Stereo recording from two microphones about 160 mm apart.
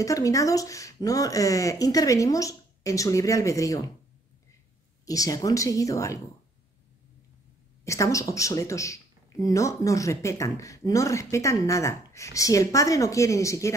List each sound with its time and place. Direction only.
0.0 s speech: 20° left (ahead or behind)
5.0 s speech: 20° left (ahead or behind)
7.8 s speech: 20° left (ahead or behind)